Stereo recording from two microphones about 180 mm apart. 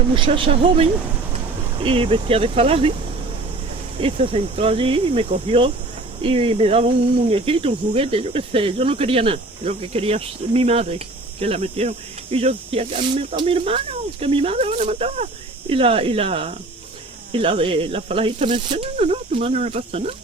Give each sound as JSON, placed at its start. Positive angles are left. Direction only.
{"t": 0.1, "sound": "speech", "side_deg": -30}
{"t": 3.9, "sound": "speech", "side_deg": -35}